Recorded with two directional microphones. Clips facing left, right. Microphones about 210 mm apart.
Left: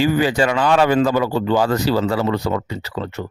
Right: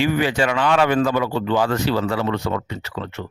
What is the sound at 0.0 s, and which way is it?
Speech, 40° left (ahead or behind).